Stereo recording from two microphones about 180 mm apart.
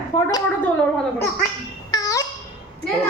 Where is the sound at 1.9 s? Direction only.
20° left (ahead or behind).